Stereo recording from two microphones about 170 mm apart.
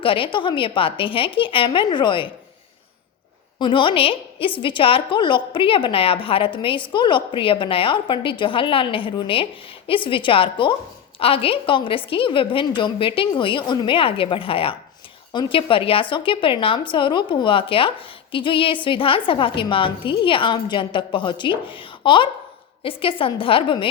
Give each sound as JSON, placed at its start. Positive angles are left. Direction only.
{"t": 0.0, "sound": "a woman's voice", "side_deg": 30}
{"t": 3.6, "sound": "a woman's voice", "side_deg": 30}